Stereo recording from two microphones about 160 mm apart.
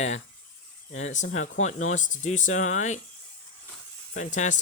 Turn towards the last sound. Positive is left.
turn(degrees=50)  # may be behind; listen again after turning